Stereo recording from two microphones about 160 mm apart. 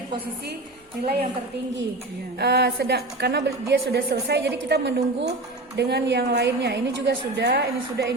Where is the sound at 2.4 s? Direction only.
90° right.